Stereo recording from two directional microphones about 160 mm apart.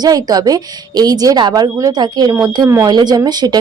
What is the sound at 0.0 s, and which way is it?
Speech, 25° right (ahead or behind).